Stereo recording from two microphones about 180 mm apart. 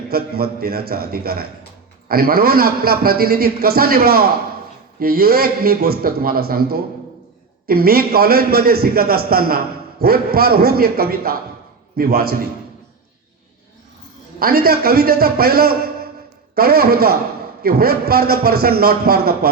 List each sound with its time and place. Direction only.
0.1 s a man's voice: 60° right (ahead or behind)
14.3 s a man's voice: 55° right (ahead or behind)